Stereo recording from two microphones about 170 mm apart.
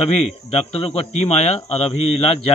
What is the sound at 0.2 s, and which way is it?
Speech, 35° left (ahead or behind).